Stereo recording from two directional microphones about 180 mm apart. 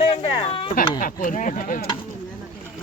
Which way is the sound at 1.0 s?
50° left (ahead or behind).